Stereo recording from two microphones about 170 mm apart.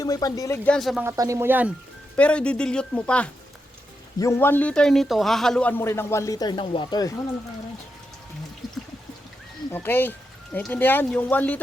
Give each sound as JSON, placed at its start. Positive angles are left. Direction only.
{"t": 0.0, "sound": "a man's voice", "side_deg": 20}
{"t": 1.0, "sound": "speech", "side_deg": -20}
{"t": 2.1, "sound": "a man's voice", "side_deg": 5}
{"t": 9.7, "sound": "a man's voice", "side_deg": 10}